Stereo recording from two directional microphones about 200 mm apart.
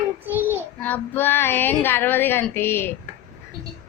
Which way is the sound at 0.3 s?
10° right (ahead or behind).